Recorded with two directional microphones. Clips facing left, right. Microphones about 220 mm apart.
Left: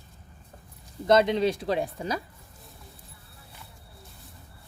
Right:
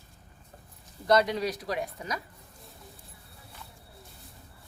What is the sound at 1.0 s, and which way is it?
Speech, 25° left (ahead or behind).